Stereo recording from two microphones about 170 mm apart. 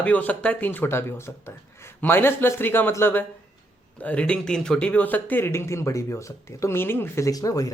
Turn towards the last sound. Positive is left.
turn(degrees=20)  # may be behind; listen again after turning